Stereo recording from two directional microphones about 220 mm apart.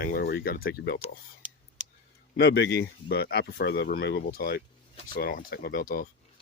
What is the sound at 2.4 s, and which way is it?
Speech, 50° left (ahead or behind).